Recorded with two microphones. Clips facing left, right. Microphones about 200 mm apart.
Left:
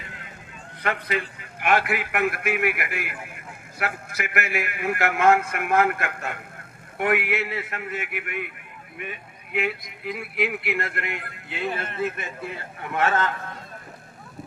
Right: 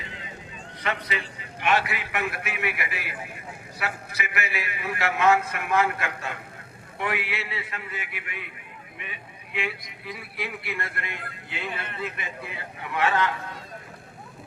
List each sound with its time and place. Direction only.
0.0 s vehicle: 50° left (ahead or behind)
0.8 s a man's voice: 50° left (ahead or behind)